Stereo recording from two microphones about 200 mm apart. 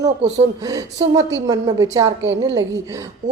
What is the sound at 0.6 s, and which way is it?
A woman's voice, 20° right (ahead or behind).